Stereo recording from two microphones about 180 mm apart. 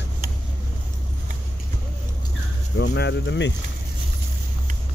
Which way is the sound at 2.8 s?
80° left.